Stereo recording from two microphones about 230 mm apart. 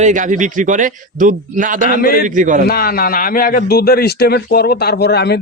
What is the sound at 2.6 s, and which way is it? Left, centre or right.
A man's voice, left.